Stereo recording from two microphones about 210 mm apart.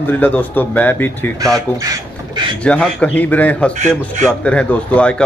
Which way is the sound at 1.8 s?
20° right (ahead or behind).